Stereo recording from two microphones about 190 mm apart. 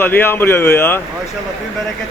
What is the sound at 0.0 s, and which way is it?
Speech, 10° left (ahead or behind).